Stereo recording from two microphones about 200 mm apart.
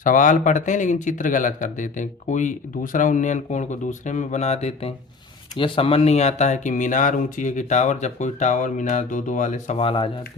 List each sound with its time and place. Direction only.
0.0 s speech: 40° left (ahead or behind)